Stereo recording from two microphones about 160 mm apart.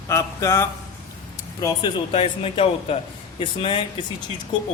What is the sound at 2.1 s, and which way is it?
A man's voice, 35° left (ahead or behind).